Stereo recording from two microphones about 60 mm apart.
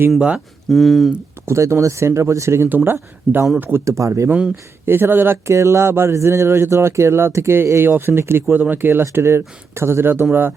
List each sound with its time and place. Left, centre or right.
0.2 s speech: centre
0.7 s speech: centre
1.5 s speech: right
2.6 s speech: right
3.8 s speech: right
4.9 s speech: right
5.5 s speech: right
8.5 s speech: right